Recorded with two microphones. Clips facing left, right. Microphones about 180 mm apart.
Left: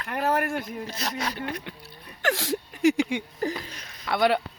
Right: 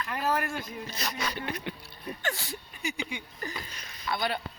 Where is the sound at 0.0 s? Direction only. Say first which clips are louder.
Left 4 dB; 60° left (ahead or behind).